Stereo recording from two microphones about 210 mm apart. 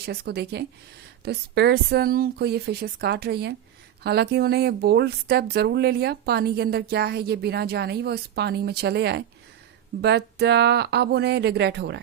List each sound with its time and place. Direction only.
0.0 s speech: 50° right (ahead or behind)